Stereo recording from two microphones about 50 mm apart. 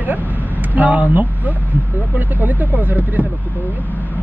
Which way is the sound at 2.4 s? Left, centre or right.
Right.